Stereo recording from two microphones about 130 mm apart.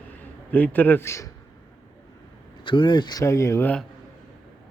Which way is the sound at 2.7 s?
40° left (ahead or behind).